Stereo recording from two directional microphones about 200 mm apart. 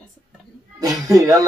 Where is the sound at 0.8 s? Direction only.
15° right (ahead or behind).